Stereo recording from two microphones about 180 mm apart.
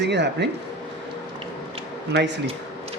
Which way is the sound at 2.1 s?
75° right (ahead or behind).